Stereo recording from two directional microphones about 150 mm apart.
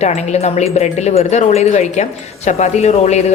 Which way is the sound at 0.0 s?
45° left (ahead or behind).